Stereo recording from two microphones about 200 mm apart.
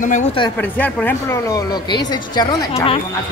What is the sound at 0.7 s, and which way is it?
Speech, 10° left (ahead or behind).